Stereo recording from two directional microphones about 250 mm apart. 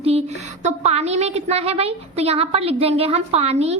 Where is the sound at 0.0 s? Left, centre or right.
Right.